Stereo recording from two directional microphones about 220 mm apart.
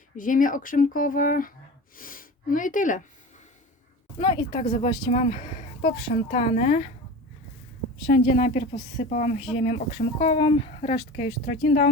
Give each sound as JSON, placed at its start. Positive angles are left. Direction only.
{"t": 0.2, "sound": "speech", "side_deg": 35}
{"t": 4.2, "sound": "speech", "side_deg": 20}
{"t": 8.1, "sound": "speech", "side_deg": 35}
{"t": 10.2, "sound": "speech", "side_deg": 20}
{"t": 11.4, "sound": "speech", "side_deg": 35}